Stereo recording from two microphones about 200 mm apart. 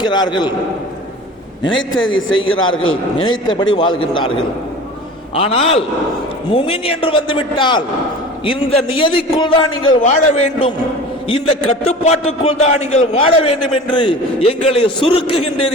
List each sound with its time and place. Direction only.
0.0 s a man's voice: 20° left (ahead or behind)
2.0 s a man's voice: 75° left (ahead or behind)
2.5 s a man's voice: 90° left
3.2 s a man's voice: 20° left (ahead or behind)
5.3 s a man's voice: 30° left (ahead or behind)